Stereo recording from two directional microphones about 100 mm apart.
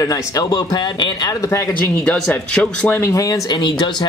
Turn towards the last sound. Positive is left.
turn(degrees=50)  # may be behind; listen again after turning